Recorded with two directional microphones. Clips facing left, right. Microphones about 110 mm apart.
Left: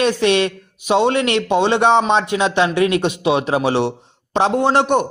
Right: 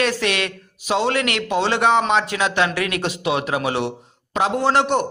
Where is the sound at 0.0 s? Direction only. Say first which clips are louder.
Left 6 dB; 20° left (ahead or behind).